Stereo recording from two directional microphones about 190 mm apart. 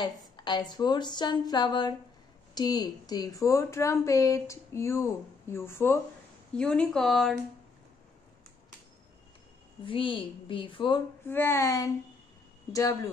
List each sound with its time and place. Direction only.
0.0 s a woman's voice: 20° left (ahead or behind); by 7.3 s centre (ahead or behind)
9.8 s speech: 25° left (ahead or behind)
11.2 s a woman's voice: 10° left (ahead or behind)